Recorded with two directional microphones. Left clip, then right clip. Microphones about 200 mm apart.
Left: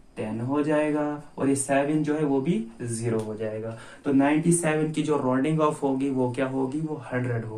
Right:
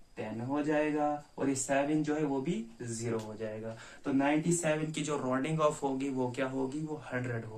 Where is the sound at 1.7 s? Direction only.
10° right (ahead or behind).